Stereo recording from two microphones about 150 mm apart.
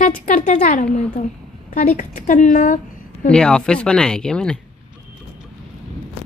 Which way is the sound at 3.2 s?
5° left (ahead or behind).